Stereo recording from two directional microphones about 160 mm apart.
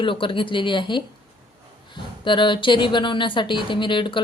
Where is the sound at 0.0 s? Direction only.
30° left (ahead or behind).